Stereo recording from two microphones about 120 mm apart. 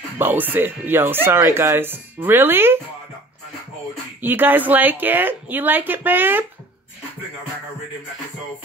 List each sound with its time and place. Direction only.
0.2 s speech: 15° right (ahead or behind)
4.2 s speech: 15° right (ahead or behind)